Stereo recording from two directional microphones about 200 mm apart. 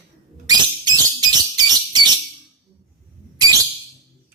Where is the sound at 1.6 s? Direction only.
20° right (ahead or behind).